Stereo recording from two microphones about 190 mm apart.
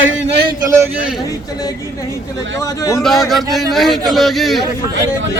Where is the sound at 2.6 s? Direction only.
15° left (ahead or behind).